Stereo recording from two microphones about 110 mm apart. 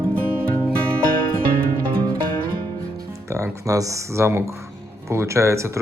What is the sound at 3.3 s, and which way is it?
Speech, 30° right (ahead or behind).